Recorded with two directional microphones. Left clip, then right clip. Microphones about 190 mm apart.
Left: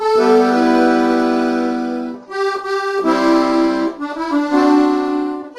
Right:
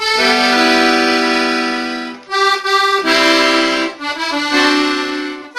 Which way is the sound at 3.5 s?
10° right (ahead or behind).